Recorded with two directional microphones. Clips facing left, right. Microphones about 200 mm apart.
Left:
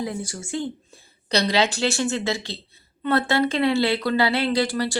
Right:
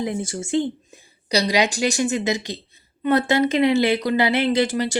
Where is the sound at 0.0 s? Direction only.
20° right (ahead or behind).